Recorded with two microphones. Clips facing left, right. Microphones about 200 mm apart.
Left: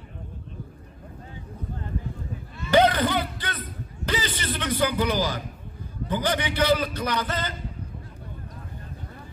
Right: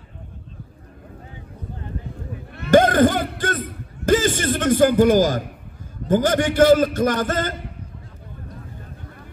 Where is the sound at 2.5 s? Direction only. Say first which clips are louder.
Right 5 dB; 55° right (ahead or behind).